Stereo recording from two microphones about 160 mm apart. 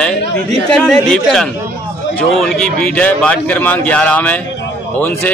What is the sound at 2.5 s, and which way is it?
A man's voice, 5° left (ahead or behind).